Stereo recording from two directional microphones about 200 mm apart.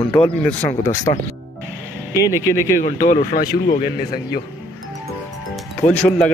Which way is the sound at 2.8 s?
40° left (ahead or behind).